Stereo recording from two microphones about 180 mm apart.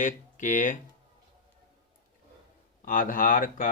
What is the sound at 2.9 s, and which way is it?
Speech, 50° left (ahead or behind).